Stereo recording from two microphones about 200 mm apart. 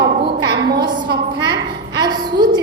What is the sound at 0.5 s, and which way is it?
A woman's voice, 20° right (ahead or behind).